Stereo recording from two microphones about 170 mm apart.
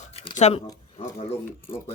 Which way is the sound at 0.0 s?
35° left (ahead or behind).